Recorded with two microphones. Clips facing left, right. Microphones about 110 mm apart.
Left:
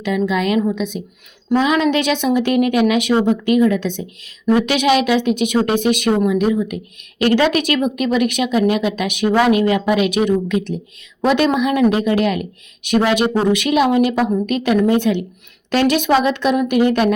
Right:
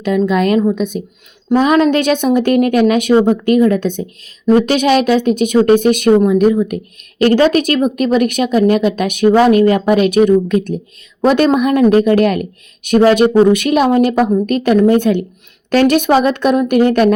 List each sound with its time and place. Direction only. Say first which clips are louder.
0.3 s speech: right 5 dB; 45° right (ahead or behind)